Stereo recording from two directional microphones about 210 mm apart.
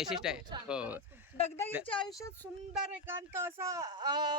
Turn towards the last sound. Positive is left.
turn(degrees=-20)  # may be behind; listen again after turning